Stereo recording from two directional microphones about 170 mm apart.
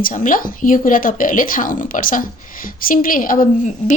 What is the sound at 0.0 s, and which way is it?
A woman's voice, 55° left (ahead or behind).